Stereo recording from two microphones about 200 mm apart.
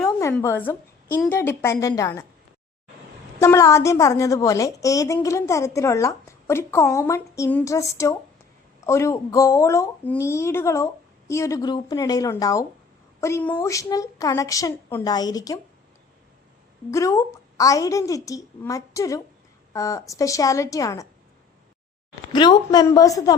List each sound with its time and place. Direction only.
0.0 s a sound: 15° left (ahead or behind)
0.3 s a woman's voice: 10° left (ahead or behind)
3.4 s a woman's voice: 15° left (ahead or behind)
16.9 s a woman's voice: 15° left (ahead or behind)
22.3 s a woman's voice: 20° left (ahead or behind)